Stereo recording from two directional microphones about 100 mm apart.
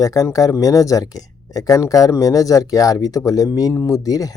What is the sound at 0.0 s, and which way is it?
Speech, 35° left (ahead or behind).